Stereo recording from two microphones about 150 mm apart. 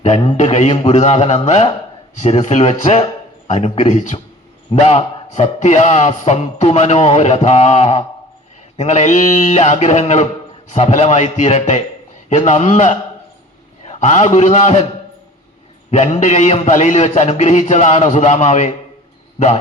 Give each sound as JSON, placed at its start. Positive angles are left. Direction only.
{"t": 0.3, "sound": "a man's voice", "side_deg": 50}
{"t": 15.9, "sound": "a man's voice", "side_deg": 45}